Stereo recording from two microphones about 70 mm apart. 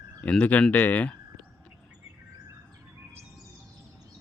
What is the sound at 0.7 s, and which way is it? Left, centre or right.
Speech, left.